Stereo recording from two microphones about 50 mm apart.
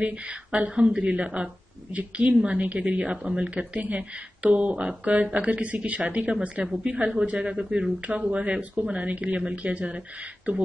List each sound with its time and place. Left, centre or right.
0.0 s a woman's voice: right